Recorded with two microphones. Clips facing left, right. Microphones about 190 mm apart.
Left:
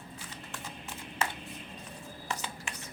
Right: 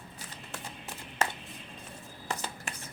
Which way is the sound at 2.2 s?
40° right (ahead or behind).